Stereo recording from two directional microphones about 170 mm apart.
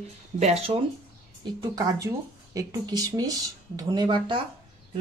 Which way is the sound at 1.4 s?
20° right (ahead or behind).